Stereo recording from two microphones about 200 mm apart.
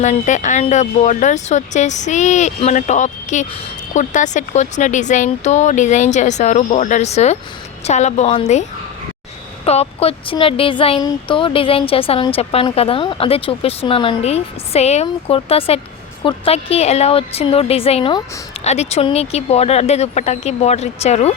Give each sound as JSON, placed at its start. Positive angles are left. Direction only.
{"t": 0.0, "sound": "speech", "side_deg": 35}
{"t": 9.6, "sound": "speech", "side_deg": 30}